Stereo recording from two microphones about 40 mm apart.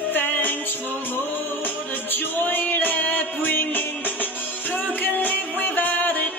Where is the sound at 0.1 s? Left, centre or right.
Left.